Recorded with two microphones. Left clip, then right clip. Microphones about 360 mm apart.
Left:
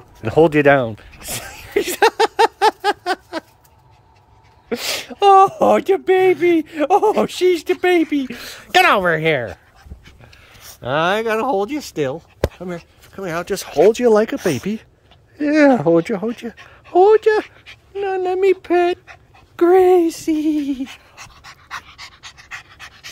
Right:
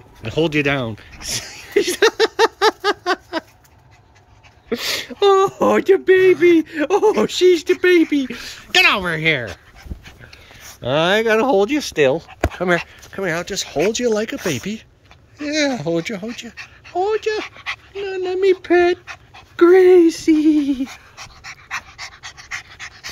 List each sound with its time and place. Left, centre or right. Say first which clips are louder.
0.2 s a sound: left 6 dB; centre
4.6 s speech: right 1 dB; centre
10.8 s speech: right 1 dB; centre
19.5 s dog: right 2 dB; centre